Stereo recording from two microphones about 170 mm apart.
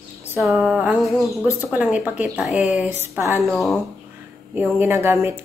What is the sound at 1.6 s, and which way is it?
Speech, 10° right (ahead or behind).